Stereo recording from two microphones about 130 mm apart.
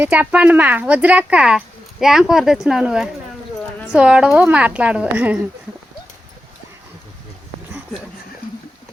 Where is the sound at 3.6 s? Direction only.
15° left (ahead or behind).